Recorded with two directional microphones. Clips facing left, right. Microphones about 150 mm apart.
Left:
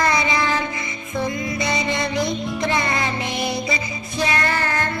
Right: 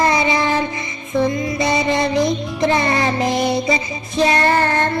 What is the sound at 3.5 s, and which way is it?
Music, 25° right (ahead or behind).